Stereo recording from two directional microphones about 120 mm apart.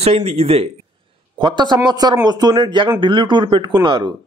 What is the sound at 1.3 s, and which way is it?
A man's voice, 40° right (ahead or behind).